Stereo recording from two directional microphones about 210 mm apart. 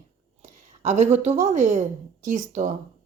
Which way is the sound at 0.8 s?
30° right (ahead or behind).